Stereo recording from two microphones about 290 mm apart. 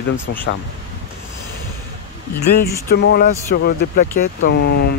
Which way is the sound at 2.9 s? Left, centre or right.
Left.